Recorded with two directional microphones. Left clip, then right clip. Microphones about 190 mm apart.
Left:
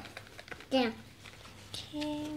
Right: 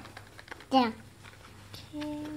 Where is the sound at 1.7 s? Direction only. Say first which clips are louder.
Left 2 dB; 5° right (ahead or behind).